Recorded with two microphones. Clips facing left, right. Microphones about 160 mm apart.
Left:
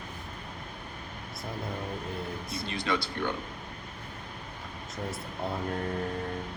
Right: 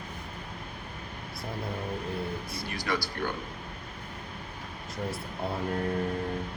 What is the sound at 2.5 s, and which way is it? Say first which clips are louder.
Speech: left 5 dB; 25° left (ahead or behind).